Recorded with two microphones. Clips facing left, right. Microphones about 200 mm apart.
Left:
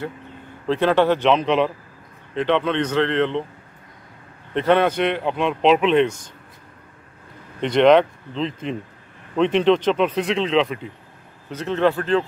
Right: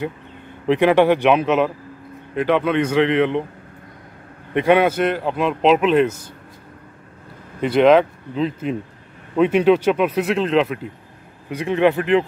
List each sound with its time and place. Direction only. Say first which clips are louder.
0.7 s speech: right 3 dB; 15° right (ahead or behind)
4.6 s a man's voice: right 2 dB; 10° right (ahead or behind)
7.6 s a man's voice: right 1 dB; 5° right (ahead or behind)